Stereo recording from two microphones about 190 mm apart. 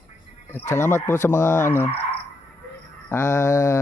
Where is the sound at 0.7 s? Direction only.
15° left (ahead or behind).